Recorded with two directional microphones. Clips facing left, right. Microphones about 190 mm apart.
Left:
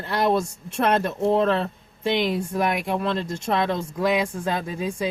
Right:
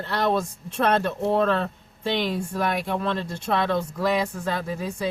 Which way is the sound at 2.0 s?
15° left (ahead or behind).